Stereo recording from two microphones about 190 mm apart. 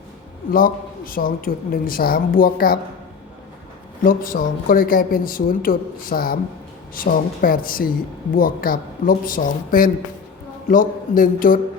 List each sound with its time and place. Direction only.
0.5 s speech: 50° left (ahead or behind)
4.0 s speech: 45° left (ahead or behind)